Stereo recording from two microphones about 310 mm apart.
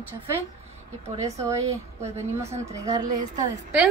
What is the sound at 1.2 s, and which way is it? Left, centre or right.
Speech, centre.